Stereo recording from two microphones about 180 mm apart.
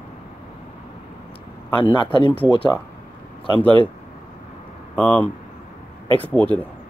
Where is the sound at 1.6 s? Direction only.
25° left (ahead or behind).